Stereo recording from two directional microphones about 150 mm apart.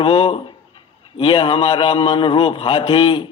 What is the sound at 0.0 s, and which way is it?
A man's voice, 35° left (ahead or behind).